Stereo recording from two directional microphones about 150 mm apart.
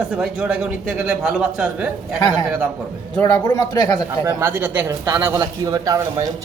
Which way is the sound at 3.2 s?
25° left (ahead or behind).